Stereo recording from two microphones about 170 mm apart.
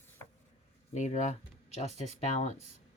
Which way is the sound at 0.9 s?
45° left (ahead or behind).